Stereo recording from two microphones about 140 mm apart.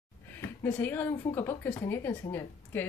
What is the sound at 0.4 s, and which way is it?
Speech, 10° left (ahead or behind).